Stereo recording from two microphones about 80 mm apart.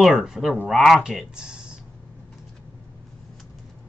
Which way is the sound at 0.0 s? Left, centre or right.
Centre.